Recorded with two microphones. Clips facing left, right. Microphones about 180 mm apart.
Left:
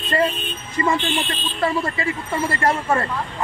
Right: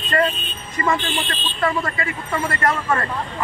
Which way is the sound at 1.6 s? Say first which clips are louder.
Even; 30° left (ahead or behind).